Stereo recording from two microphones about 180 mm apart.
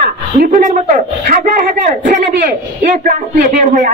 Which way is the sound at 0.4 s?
50° right (ahead or behind).